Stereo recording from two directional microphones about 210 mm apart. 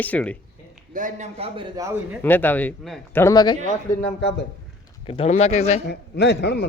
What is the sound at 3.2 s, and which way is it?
Speech, 20° left (ahead or behind).